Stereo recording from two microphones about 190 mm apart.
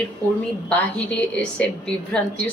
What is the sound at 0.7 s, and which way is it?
A woman's voice, 5° left (ahead or behind).